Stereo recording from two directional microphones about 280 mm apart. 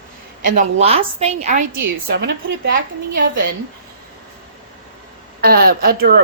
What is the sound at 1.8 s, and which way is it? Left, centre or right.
Speech, right.